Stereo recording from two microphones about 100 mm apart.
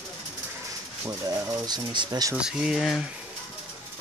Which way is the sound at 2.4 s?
5° right (ahead or behind).